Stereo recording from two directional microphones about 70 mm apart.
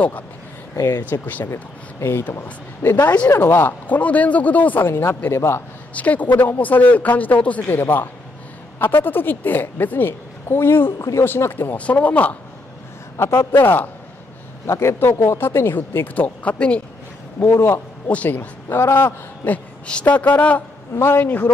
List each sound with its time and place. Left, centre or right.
0.7 s speech: left
1.5 s a woman's voice: left
3.8 s a woman's voice: left
5.9 s a woman's voice: left
11.0 s speech: left
11.2 s speech: left
11.7 s a woman's voice: left
13.2 s speech: left
14.7 s speech: left; by 16.8 s centre
17.4 s speech: left
18.0 s a woman's voice: left
19.4 s a woman's voice: centre